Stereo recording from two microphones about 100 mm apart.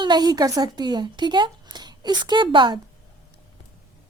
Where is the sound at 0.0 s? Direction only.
45° right (ahead or behind).